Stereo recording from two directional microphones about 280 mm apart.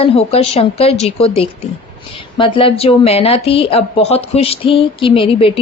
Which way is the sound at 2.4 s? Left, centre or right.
Centre.